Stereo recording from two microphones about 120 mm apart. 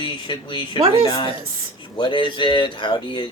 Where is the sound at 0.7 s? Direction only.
45° right (ahead or behind).